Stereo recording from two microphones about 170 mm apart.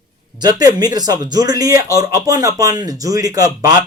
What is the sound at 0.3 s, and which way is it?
A man's voice, 25° right (ahead or behind).